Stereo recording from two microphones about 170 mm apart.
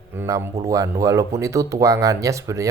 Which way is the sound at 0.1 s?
15° right (ahead or behind).